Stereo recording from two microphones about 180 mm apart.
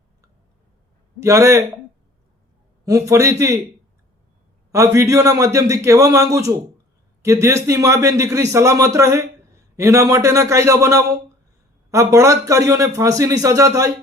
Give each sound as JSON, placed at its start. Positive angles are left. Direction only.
{"t": 1.2, "sound": "speech", "side_deg": -15}
{"t": 2.8, "sound": "speech", "side_deg": -15}
{"t": 4.7, "sound": "speech", "side_deg": -15}